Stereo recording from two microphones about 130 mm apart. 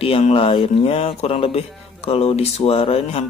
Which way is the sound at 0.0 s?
45° left (ahead or behind).